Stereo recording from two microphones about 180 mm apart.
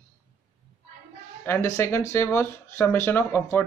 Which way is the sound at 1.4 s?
15° left (ahead or behind).